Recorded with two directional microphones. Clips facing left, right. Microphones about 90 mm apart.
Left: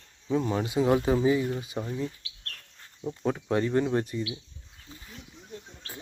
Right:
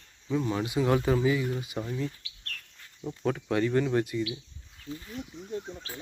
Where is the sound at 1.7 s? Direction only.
10° left (ahead or behind).